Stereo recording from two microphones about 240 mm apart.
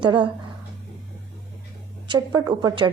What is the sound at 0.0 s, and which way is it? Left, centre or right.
Speech, centre.